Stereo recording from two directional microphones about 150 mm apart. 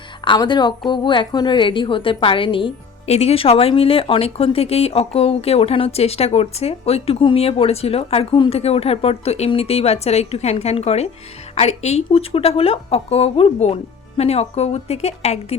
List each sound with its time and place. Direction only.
0.3 s a woman's voice: 30° left (ahead or behind)